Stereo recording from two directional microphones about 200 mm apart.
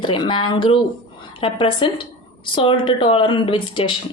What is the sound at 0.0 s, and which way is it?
Speech, 25° left (ahead or behind).